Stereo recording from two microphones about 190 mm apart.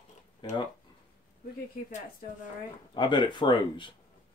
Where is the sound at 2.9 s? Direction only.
25° left (ahead or behind).